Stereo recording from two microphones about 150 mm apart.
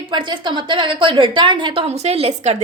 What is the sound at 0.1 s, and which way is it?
A woman's voice, 30° right (ahead or behind).